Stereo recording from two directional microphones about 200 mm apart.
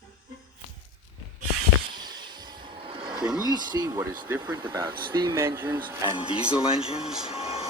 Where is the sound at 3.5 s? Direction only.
20° right (ahead or behind); by 6.9 s 5° right (ahead or behind).